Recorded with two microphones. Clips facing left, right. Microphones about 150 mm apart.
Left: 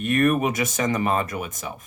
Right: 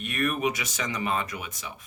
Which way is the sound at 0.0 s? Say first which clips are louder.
Left 7 dB; 45° left (ahead or behind).